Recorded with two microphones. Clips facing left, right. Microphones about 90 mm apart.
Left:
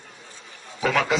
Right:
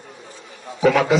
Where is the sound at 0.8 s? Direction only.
45° right (ahead or behind).